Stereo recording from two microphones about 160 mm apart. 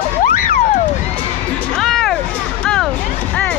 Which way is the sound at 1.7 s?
Centre (ahead or behind).